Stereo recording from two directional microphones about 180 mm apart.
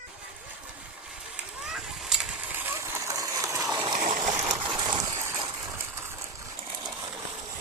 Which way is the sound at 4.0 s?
45° right (ahead or behind).